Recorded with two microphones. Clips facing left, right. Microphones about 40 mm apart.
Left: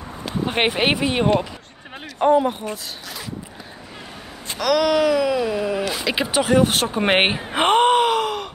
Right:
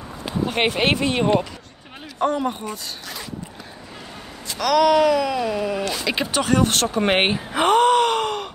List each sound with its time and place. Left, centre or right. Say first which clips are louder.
0.5 s speech: left 1 dB; centre
2.7 s speech: left 1 dB; centre
4.6 s speech: right 2 dB; centre
7.5 s speech: even; left
8.1 s groan: left 1 dB; centre